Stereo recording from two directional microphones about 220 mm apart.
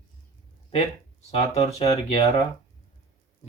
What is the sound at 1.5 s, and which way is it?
Speech, 30° left (ahead or behind).